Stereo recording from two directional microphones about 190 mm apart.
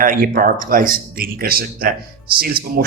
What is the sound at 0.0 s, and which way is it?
Speech, 45° right (ahead or behind).